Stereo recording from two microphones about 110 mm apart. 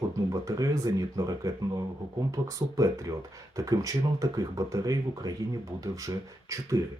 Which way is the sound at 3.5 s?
30° right (ahead or behind).